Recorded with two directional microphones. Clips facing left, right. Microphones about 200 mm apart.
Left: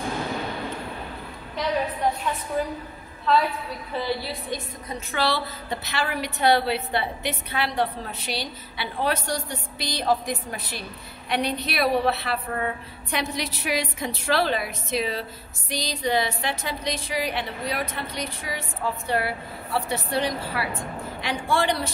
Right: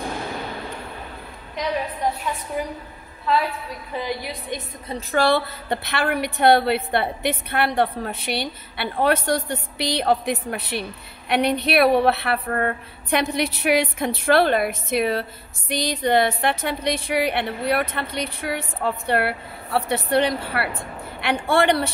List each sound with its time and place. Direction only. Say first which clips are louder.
2.6 s a woman's voice: left 2 dB; 10° right (ahead or behind)
3.9 s a woman's voice: even; 15° right (ahead or behind)
5.1 s a woman's voice: right 6 dB; 50° right (ahead or behind)